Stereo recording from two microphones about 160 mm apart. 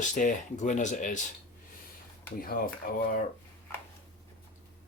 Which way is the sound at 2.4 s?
65° left (ahead or behind).